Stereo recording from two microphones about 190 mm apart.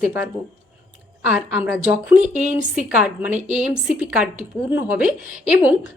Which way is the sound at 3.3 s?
40° right (ahead or behind).